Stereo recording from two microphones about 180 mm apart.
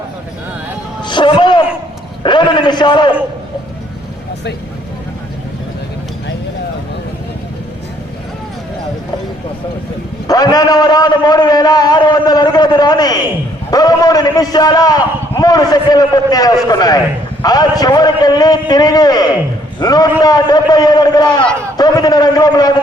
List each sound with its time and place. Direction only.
1.0 s music: 25° left (ahead or behind)
2.2 s a man's voice: 25° left (ahead or behind)
10.2 s a man's voice: 20° left (ahead or behind)